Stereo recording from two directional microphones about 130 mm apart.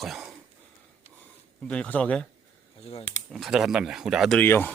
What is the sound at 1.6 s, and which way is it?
Speech, 10° left (ahead or behind).